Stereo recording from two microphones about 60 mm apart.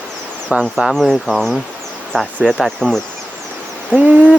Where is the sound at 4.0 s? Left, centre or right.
Right.